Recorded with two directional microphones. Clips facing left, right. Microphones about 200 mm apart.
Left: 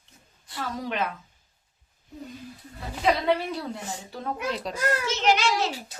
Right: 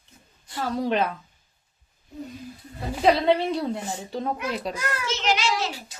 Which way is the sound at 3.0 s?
25° right (ahead or behind).